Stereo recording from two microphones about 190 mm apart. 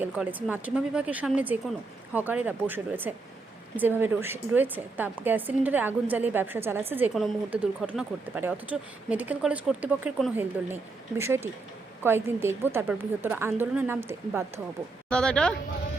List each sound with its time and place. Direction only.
0.0 s a woman's voice: 10° right (ahead or behind)
11.2 s a woman's voice: 15° right (ahead or behind)
15.1 s speech: 5° left (ahead or behind)